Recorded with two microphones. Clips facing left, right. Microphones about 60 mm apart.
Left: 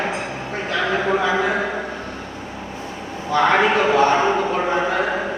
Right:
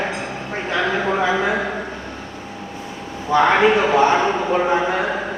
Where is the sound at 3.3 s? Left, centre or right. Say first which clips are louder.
Right 2 dB; centre.